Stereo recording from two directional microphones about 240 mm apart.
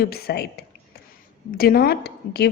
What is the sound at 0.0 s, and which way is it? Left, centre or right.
Speech, left.